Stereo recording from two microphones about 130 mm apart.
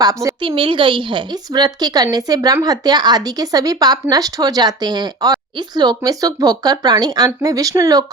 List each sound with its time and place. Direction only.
0.0 s a woman's voice: 25° right (ahead or behind)
0.4 s a woman's voice: 40° right (ahead or behind)